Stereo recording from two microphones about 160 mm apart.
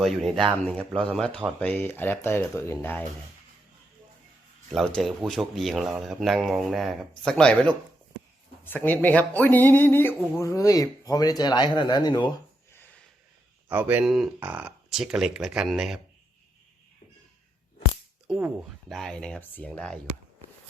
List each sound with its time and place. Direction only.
0.0 s speech: centre (ahead or behind)
4.9 s speech: centre (ahead or behind); by 12.3 s 25° left (ahead or behind)
13.7 s speech: 10° right (ahead or behind)
18.3 s speech: 15° right (ahead or behind)
18.9 s speech: centre (ahead or behind)